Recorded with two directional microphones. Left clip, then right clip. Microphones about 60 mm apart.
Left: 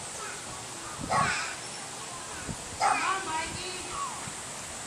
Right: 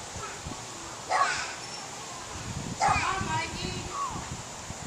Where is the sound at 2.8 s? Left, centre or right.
Right.